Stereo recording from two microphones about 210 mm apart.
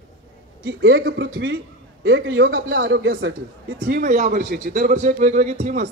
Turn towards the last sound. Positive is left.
turn(degrees=-35)  # may be behind; listen again after turning